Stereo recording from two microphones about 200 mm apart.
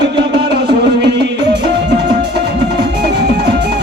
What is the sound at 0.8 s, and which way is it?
Music, 55° right (ahead or behind).